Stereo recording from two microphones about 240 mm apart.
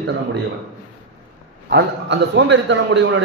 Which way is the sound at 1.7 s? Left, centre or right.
Right.